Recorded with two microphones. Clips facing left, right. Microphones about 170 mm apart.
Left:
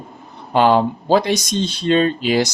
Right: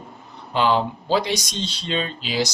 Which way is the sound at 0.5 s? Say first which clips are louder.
Left 6 dB; 50° left (ahead or behind).